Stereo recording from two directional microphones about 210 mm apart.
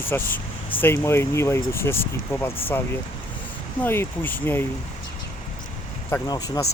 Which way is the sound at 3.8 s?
10° left (ahead or behind).